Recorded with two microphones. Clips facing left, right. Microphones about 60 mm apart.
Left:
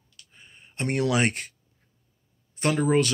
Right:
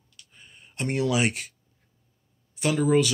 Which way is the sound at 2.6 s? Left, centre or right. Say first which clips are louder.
Even; left.